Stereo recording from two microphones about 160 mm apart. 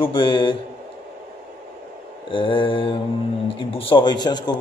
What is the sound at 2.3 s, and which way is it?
A man's voice, 35° left (ahead or behind).